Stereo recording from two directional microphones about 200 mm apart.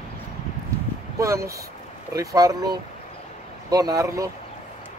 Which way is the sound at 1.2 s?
15° right (ahead or behind).